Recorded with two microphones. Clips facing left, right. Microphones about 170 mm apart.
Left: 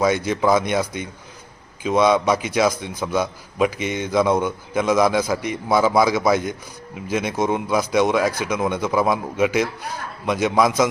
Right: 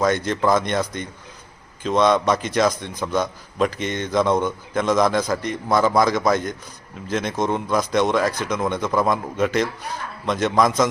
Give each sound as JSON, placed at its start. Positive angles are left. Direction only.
{"t": 0.0, "sound": "a man's voice", "side_deg": 5}